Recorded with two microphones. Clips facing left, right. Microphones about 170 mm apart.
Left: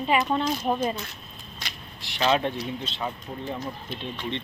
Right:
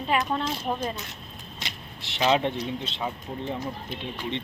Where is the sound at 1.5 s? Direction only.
25° right (ahead or behind).